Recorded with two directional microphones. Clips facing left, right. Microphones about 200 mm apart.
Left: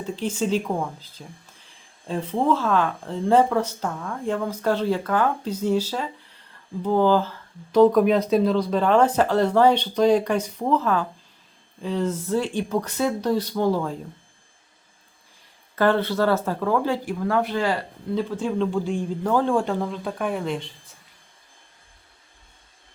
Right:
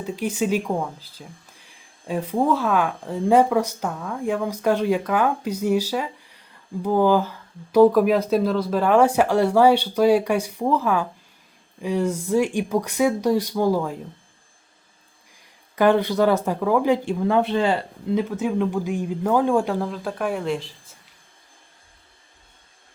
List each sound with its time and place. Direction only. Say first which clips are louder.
0.0 s speech: right 1 dB; 10° right (ahead or behind)
15.7 s speech: right 3 dB; 15° right (ahead or behind)